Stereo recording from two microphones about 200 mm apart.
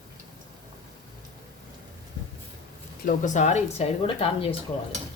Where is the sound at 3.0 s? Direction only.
40° left (ahead or behind).